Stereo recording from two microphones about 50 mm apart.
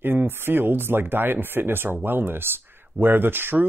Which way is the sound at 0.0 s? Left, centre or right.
Right.